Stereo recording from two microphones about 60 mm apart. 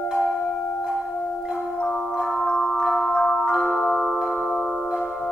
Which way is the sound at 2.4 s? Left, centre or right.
Centre.